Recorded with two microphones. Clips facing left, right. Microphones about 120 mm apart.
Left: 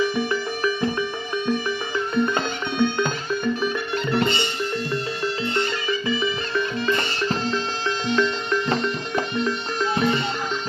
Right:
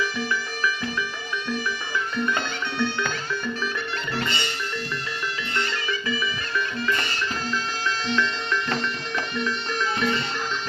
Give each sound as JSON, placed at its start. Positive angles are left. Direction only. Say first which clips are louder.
{"t": 0.0, "sound": "music", "louder": "left 5 dB", "side_deg": 25}
{"t": 2.1, "sound": "music", "louder": "left 5 dB", "side_deg": 25}